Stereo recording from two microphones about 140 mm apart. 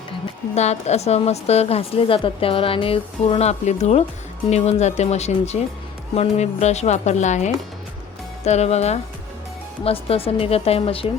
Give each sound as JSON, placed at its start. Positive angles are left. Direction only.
{"t": 0.5, "sound": "a woman's voice", "side_deg": 50}